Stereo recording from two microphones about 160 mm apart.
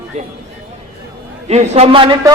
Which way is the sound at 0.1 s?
45° right (ahead or behind).